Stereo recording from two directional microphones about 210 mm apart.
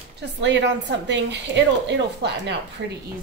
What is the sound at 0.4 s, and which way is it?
A woman's voice, 60° right (ahead or behind).